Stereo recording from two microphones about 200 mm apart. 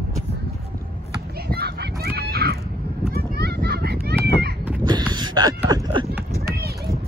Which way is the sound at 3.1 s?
50° right (ahead or behind).